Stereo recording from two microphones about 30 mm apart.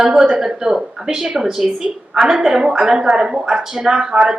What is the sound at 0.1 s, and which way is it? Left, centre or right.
A woman's voice, right.